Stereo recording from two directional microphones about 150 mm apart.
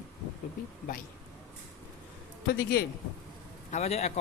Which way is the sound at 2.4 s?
80° left.